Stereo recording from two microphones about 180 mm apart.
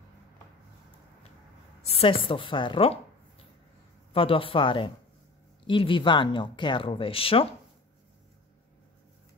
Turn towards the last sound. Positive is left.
turn(degrees=30)  # may be behind; listen again after turning